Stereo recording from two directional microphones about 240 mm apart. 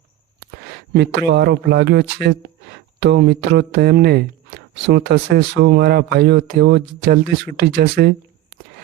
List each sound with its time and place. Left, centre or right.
0.7 s speech: right